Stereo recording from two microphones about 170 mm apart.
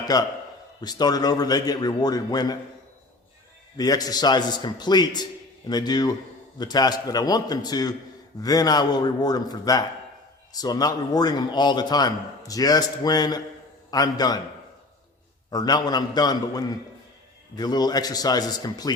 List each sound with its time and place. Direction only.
0.0 s a man's voice: 20° left (ahead or behind)
3.8 s a man's voice: 20° left (ahead or behind)
15.4 s a man's voice: 25° left (ahead or behind)